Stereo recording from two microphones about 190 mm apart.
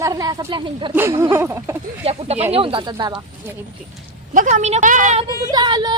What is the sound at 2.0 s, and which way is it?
A woman's voice, 35° right (ahead or behind).